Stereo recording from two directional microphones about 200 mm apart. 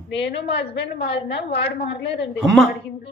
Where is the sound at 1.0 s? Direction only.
55° left (ahead or behind).